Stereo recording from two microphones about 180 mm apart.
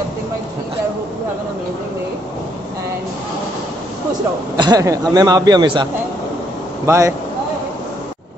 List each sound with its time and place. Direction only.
4.6 s a man's voice: 20° right (ahead or behind)
6.9 s speech: 15° right (ahead or behind)